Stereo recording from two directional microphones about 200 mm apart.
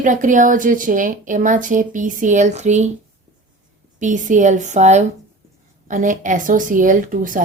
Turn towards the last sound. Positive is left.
turn(degrees=-40)  # may be behind; listen again after turning